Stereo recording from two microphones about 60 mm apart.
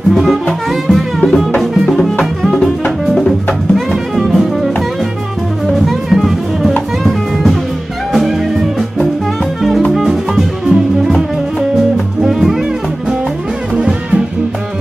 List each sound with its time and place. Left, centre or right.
0.1 s music: centre
3.7 s music: centre
5.7 s music: centre
12.2 s music: centre
13.7 s music: centre